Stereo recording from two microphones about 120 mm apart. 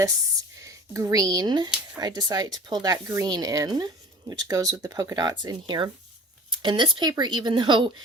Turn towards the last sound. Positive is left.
turn(degrees=-40)  # may be behind; listen again after turning